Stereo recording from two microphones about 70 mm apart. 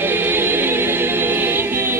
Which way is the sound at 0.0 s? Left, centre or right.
Right.